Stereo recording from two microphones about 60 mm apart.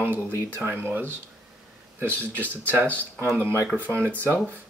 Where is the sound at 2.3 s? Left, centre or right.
Left.